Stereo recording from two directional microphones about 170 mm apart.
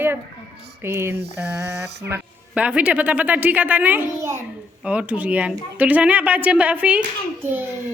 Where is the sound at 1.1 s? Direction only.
75° right (ahead or behind).